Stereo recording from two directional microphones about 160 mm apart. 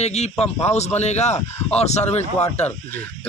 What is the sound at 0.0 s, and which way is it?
A man's voice, 45° left (ahead or behind).